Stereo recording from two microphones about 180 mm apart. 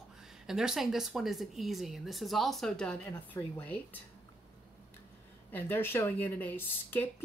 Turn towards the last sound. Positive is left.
turn(degrees=10)  # may be behind; listen again after turning